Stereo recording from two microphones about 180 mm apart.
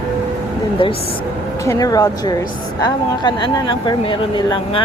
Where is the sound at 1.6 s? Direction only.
20° left (ahead or behind).